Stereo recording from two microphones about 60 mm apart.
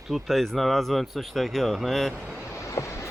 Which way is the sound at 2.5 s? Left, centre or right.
Left.